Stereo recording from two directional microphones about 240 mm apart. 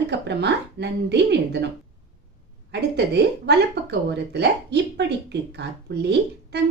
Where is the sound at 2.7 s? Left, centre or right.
Right.